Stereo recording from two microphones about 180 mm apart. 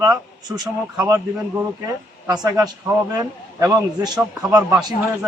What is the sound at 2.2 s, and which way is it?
A man's voice, 20° right (ahead or behind).